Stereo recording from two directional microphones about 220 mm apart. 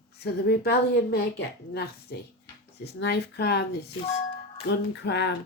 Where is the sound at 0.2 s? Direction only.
45° left (ahead or behind).